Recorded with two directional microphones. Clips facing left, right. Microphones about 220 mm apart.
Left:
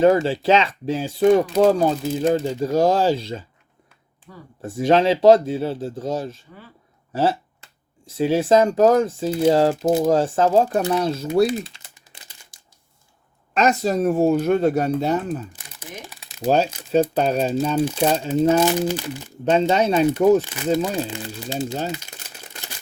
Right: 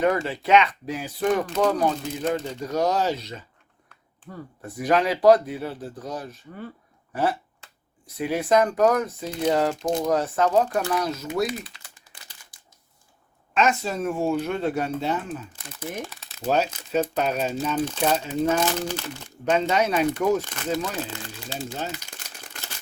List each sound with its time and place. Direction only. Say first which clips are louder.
0.0 s speech: left 7 dB; 30° left (ahead or behind)
4.8 s speech: left 5 dB; 25° left (ahead or behind)
9.7 s speech: left 6 dB; 5° left (ahead or behind)
10.0 s speech: left 2 dB; 30° left (ahead or behind)
13.5 s speech: left 4 dB; 40° left (ahead or behind)
16.0 s shuffling cards: left 7 dB; 15° left (ahead or behind)
16.5 s speech: left 5 dB; 30° left (ahead or behind)
17.7 s speech: left 5 dB; 10° left (ahead or behind)
18.0 s speech: left 5 dB; 30° left (ahead or behind)
18.7 s speech: left 6 dB; 10° left (ahead or behind)
19.5 s speech: left 4 dB; 30° left (ahead or behind)
20.4 s speech: left 3 dB; 10° left (ahead or behind)
20.7 s speech: left 5 dB; 25° left (ahead or behind)